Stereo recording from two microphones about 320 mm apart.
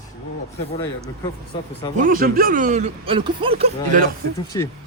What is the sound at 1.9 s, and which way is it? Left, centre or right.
Speech, right.